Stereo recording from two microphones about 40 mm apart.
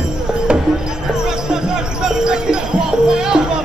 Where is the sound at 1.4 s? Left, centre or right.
Centre.